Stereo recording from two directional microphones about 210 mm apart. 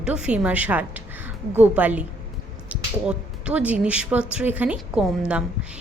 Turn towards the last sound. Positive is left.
turn(degrees=-5)  # may be behind; listen again after turning